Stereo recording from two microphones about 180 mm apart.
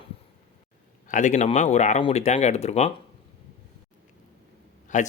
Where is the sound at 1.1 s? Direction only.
45° left (ahead or behind).